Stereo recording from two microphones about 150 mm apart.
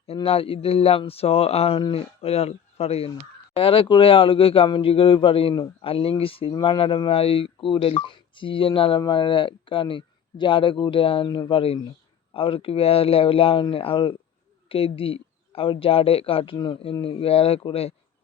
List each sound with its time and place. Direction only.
0.1 s a man's voice: 40° left (ahead or behind)
16.6 s a man's voice: 25° left (ahead or behind)